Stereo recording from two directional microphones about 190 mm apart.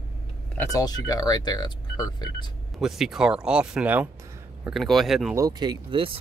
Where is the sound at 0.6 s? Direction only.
20° left (ahead or behind).